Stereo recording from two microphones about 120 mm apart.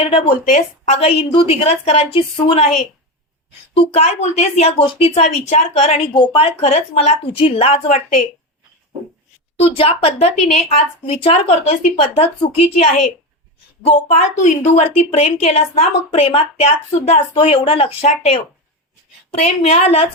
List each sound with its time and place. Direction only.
0.0 s a woman's voice: 50° left (ahead or behind); by 2.8 s 70° left (ahead or behind)
3.8 s a woman's voice: 55° left (ahead or behind)
6.1 s a woman's voice: 50° left (ahead or behind)
9.6 s a woman's voice: 55° left (ahead or behind)
13.8 s a woman's voice: 70° left (ahead or behind); by 17.9 s 50° left (ahead or behind)
19.3 s a woman's voice: 65° left (ahead or behind)